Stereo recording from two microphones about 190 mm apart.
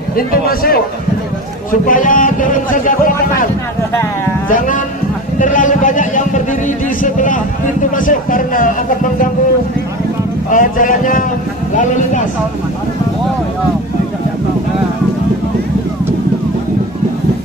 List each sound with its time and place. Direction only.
0.1 s a man's voice: 50° left (ahead or behind)
4.5 s a sound: 45° left (ahead or behind)
7.0 s speech: 45° left (ahead or behind)
10.5 s a man's voice: 45° left (ahead or behind)